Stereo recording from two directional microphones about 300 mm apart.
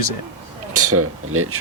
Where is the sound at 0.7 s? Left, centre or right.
Right.